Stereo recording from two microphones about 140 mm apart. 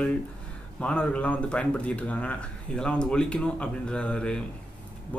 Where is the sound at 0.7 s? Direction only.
10° left (ahead or behind).